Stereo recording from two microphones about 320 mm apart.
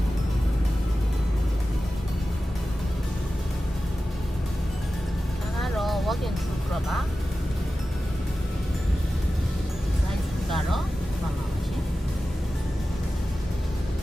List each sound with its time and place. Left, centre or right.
5.5 s music: centre